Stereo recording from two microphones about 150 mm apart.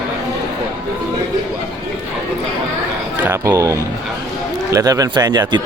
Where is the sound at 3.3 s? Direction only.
20° right (ahead or behind).